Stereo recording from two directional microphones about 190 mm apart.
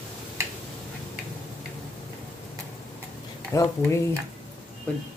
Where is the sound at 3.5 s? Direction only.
15° left (ahead or behind).